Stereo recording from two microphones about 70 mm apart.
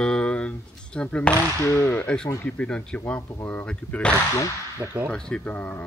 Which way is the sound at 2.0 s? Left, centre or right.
Centre.